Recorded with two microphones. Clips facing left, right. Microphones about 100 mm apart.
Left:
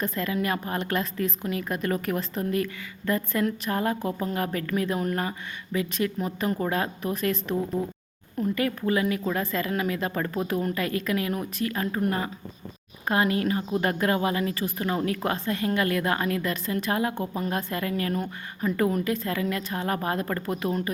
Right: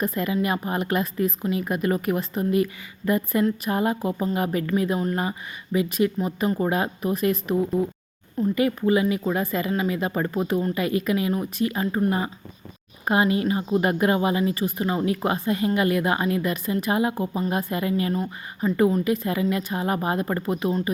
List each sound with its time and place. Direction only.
0.0 s speech: 10° right (ahead or behind)